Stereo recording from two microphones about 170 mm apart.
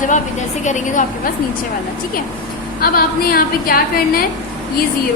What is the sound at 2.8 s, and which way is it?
A woman's voice, 60° left (ahead or behind).